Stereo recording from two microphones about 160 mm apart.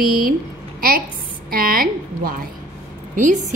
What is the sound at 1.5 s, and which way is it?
A woman's voice, 65° right (ahead or behind).